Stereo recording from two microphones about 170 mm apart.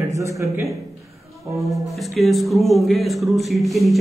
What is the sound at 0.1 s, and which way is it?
Speech, 20° right (ahead or behind).